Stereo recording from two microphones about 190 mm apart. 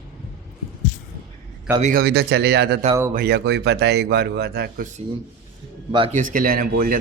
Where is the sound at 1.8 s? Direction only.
50° right (ahead or behind).